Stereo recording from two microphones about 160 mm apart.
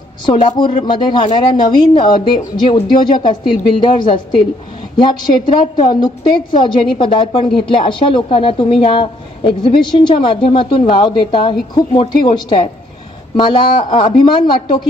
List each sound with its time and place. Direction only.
0.3 s a woman's voice: 30° left (ahead or behind)